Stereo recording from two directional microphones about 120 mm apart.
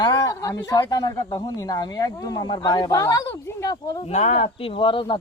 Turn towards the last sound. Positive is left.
turn(degrees=45)  # may be behind; listen again after turning